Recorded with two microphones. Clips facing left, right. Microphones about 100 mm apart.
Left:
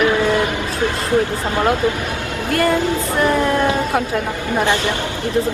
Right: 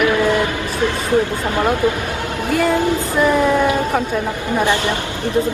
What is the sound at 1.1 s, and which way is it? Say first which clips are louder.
Speech: even; 20° right (ahead or behind).